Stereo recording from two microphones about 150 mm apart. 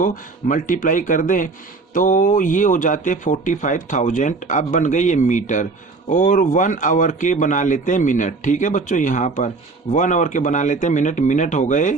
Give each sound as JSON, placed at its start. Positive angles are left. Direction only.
{"t": 0.0, "sound": "speech", "side_deg": 60}